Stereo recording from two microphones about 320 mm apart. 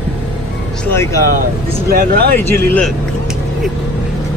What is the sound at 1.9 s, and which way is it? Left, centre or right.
Speech, right.